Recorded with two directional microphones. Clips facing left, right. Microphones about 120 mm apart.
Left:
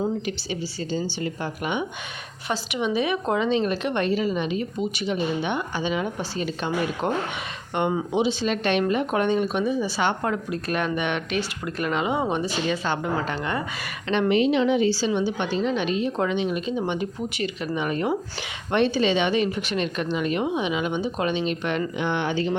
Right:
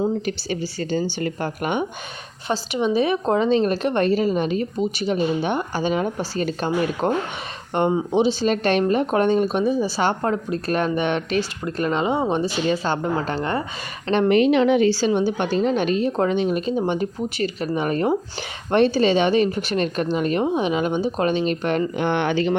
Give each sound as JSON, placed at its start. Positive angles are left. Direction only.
{"t": 0.3, "sound": "a woman's voice", "side_deg": -50}
{"t": 2.5, "sound": "a woman's voice", "side_deg": -30}
{"t": 14.3, "sound": "a woman's voice", "side_deg": -60}